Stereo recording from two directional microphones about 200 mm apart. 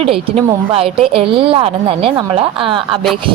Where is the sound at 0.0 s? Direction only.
30° right (ahead or behind).